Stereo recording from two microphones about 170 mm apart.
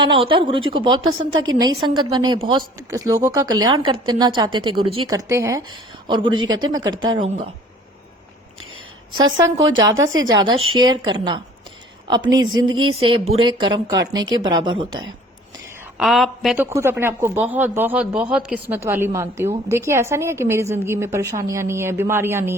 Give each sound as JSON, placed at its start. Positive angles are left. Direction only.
{"t": 0.0, "sound": "a woman's voice", "side_deg": -30}
{"t": 5.0, "sound": "a woman's voice", "side_deg": -20}
{"t": 8.7, "sound": "a woman's voice", "side_deg": -25}
{"t": 16.0, "sound": "a woman's voice", "side_deg": 0}
{"t": 16.6, "sound": "speech", "side_deg": -15}